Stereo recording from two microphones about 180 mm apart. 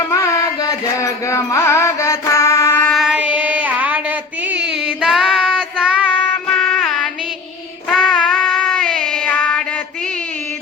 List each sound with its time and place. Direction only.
0.1 s music: 20° left (ahead or behind)
2.9 s child singing: 5° right (ahead or behind)